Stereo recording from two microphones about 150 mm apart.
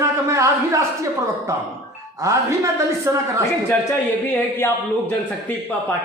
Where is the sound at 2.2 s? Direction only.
20° right (ahead or behind).